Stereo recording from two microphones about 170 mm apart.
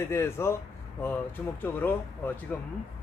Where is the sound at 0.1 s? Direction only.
15° left (ahead or behind).